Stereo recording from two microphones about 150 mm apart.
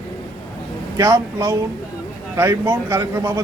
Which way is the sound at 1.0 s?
20° right (ahead or behind).